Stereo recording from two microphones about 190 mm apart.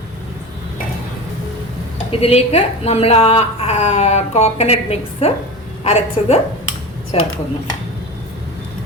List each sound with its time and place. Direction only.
2.2 s a woman's voice: 30° left (ahead or behind)